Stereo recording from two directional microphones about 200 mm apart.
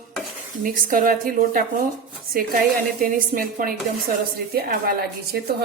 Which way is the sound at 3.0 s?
45° right (ahead or behind).